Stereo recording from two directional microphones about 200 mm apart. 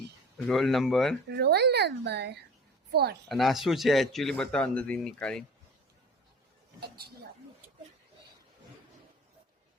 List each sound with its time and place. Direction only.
0.3 s speech: centre (ahead or behind)
1.3 s a woman's voice: 55° right (ahead or behind)
3.2 s speech: centre (ahead or behind)
6.7 s speech: 50° right (ahead or behind)